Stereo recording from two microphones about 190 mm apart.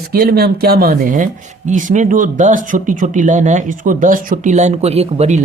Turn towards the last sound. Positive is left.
turn(degrees=-35)  # may be behind; listen again after turning